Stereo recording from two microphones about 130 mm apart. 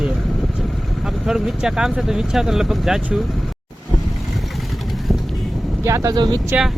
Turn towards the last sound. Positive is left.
turn(degrees=-30)  # may be behind; listen again after turning